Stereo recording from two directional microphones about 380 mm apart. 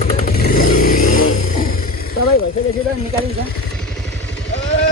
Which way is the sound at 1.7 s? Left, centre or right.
Left.